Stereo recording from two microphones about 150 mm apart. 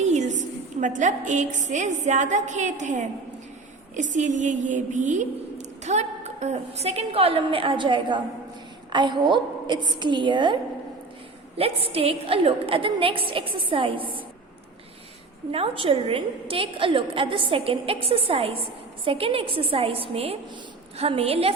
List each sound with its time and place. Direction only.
0.0 s a sound: 50° right (ahead or behind)
0.8 s a woman's voice: 55° right (ahead or behind); by 14.1 s 35° right (ahead or behind)
15.5 s a woman's voice: 40° right (ahead or behind)